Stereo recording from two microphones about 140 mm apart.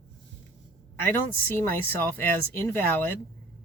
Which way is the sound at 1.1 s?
15° left (ahead or behind).